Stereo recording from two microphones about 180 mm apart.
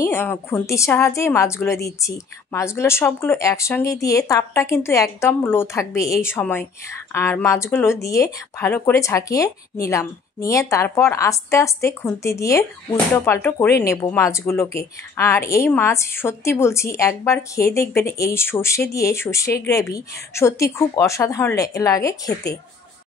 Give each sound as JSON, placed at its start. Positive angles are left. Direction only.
{"t": 0.0, "sound": "speech", "side_deg": 15}